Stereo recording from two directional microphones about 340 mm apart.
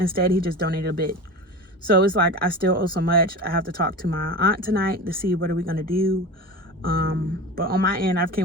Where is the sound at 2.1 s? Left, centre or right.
Right.